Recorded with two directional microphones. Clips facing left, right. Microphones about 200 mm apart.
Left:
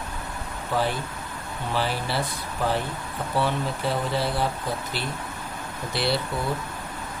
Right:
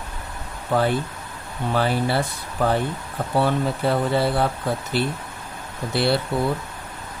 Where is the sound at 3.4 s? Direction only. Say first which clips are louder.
Right 5 dB; 55° right (ahead or behind).